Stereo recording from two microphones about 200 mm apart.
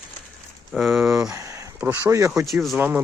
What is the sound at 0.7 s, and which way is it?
Speech, centre (ahead or behind).